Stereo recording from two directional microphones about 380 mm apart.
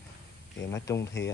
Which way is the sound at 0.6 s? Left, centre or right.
Centre.